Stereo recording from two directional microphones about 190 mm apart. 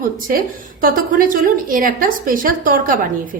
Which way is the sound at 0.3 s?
50° right (ahead or behind).